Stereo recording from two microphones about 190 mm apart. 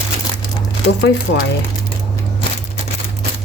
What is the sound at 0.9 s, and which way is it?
Speech, 65° left (ahead or behind).